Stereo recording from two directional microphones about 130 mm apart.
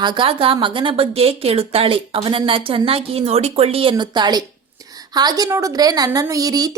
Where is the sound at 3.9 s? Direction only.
35° right (ahead or behind).